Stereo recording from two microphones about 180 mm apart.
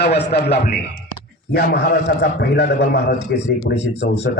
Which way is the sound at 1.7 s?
65° left (ahead or behind).